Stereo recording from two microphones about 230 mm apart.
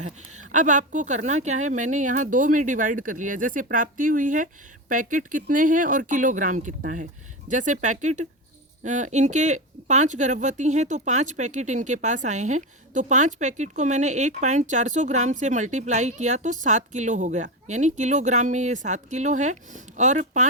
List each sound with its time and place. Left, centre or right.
0.3 s speech: right